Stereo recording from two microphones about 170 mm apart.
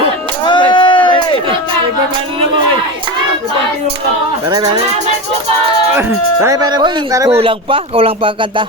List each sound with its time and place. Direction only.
0.4 s a sound: 25° left (ahead or behind)
5.9 s speech: 15° right (ahead or behind)
7.3 s speech: 35° right (ahead or behind)